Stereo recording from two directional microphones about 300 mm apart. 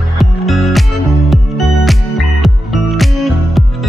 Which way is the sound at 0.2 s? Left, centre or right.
Centre.